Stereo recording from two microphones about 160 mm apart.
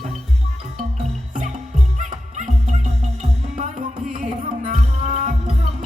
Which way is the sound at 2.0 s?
50° right (ahead or behind).